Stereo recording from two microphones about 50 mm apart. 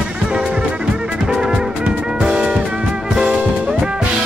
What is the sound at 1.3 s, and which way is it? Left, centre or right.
Music, centre.